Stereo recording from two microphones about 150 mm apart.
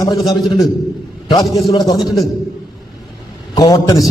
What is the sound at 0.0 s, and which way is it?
Speech, 25° left (ahead or behind).